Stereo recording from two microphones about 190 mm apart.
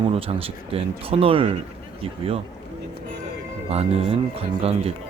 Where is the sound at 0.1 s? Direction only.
30° right (ahead or behind).